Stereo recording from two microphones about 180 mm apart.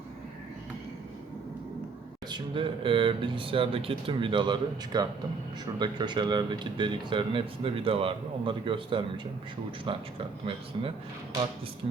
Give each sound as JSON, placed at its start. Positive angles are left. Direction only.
{"t": 2.3, "sound": "speech", "side_deg": -30}